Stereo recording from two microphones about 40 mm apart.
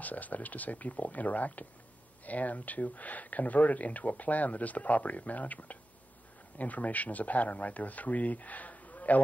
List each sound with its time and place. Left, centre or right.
0.0 s speech: left